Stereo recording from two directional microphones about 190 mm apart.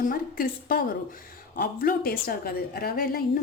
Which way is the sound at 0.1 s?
50° left (ahead or behind).